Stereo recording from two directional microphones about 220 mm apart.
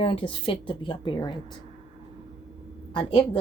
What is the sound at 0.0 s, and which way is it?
Speech, 25° left (ahead or behind).